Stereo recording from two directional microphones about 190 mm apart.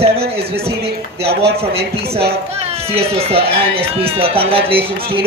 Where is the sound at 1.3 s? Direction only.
60° right (ahead or behind).